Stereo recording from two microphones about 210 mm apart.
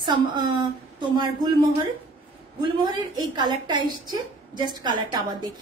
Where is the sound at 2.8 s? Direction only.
20° right (ahead or behind).